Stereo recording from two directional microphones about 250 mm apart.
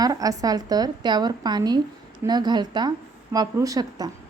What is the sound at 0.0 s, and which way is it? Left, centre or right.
A woman's voice, centre.